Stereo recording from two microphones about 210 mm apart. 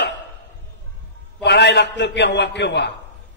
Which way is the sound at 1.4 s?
55° left (ahead or behind).